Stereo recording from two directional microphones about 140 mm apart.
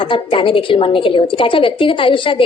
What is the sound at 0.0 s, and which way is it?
A woman's voice, 40° left (ahead or behind).